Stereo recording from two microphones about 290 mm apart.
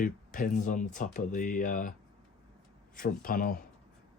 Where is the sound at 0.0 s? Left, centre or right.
Left.